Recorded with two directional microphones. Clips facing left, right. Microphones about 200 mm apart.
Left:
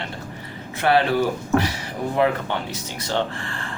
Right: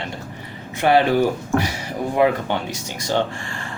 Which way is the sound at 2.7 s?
15° right (ahead or behind).